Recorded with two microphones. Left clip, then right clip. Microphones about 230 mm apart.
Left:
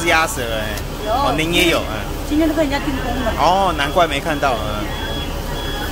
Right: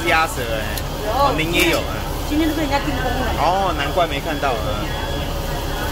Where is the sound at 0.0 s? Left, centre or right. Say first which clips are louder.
Left 2 dB; centre.